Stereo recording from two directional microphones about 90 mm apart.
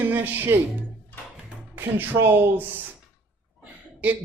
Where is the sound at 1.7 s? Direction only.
25° right (ahead or behind).